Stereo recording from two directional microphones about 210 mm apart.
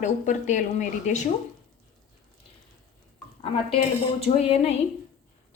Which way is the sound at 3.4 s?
30° left (ahead or behind).